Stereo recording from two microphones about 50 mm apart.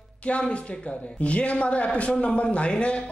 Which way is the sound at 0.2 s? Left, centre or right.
Left.